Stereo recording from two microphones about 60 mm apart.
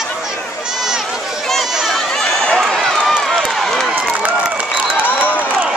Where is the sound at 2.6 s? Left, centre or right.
Centre.